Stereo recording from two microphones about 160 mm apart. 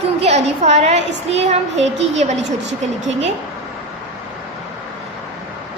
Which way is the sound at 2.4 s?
90° right.